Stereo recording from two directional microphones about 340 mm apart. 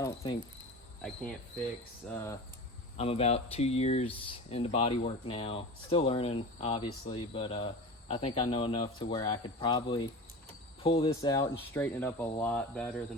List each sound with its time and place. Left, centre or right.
0.0 s cricket: centre
2.1 s speech: centre